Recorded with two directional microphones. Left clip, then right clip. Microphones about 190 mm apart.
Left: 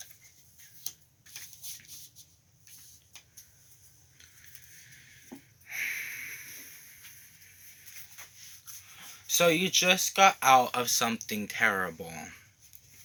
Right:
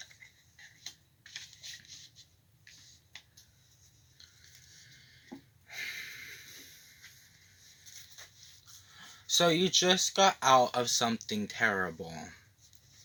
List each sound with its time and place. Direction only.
5.6 s wheeze: 50° right (ahead or behind)
9.2 s speech: 50° right (ahead or behind)